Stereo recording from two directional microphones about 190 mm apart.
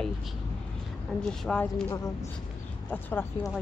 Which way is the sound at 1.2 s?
5° left (ahead or behind).